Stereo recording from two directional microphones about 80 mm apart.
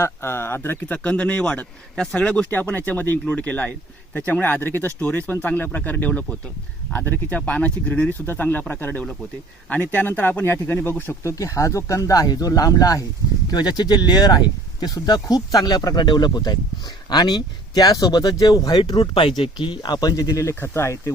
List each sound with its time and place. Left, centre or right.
0.0 s speech: left
11.2 s speech: left
13.5 s speech: left
16.0 s speech: left
18.8 s speech: left
19.4 s speech: left